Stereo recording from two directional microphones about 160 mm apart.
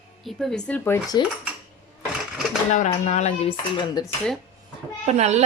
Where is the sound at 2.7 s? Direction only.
45° left (ahead or behind).